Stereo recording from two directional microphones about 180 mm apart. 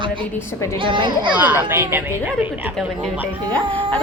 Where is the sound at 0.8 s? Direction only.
25° right (ahead or behind).